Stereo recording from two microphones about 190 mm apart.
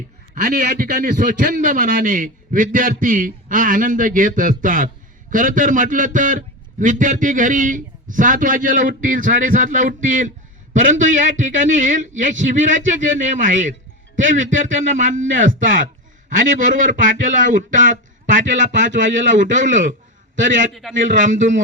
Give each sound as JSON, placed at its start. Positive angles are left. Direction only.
{"t": 0.4, "sound": "a man's voice", "side_deg": -45}
{"t": 19.0, "sound": "speech", "side_deg": -85}
{"t": 19.3, "sound": "a man's voice", "side_deg": -40}
{"t": 21.0, "sound": "a man's voice", "side_deg": -45}